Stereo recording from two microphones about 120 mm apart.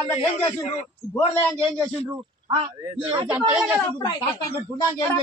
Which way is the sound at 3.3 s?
10° right (ahead or behind).